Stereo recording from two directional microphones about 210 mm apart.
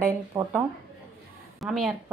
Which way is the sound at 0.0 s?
10° right (ahead or behind).